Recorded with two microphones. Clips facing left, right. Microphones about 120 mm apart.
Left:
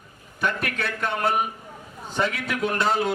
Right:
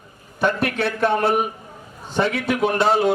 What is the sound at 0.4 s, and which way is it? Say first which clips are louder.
Speech: right 6 dB; 30° right (ahead or behind).